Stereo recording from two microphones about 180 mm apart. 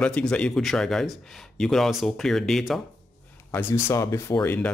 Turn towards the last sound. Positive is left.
turn(degrees=10)  # may be behind; listen again after turning